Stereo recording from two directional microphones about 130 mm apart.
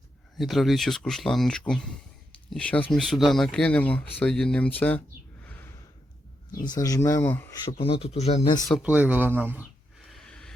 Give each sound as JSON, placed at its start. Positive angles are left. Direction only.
{"t": 0.3, "sound": "speech", "side_deg": 0}
{"t": 6.7, "sound": "speech", "side_deg": 30}
{"t": 7.6, "sound": "speech", "side_deg": 45}
{"t": 8.4, "sound": "speech", "side_deg": 30}
{"t": 8.8, "sound": "speech", "side_deg": -10}
{"t": 10.1, "sound": "gasp", "side_deg": 5}